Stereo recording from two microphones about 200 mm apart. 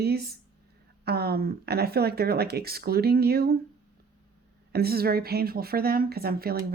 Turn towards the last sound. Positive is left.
turn(degrees=-50)  # may be behind; listen again after turning